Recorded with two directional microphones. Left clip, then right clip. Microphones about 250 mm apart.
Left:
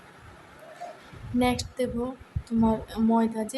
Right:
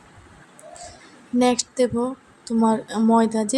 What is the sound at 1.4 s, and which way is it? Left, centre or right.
Speech, centre.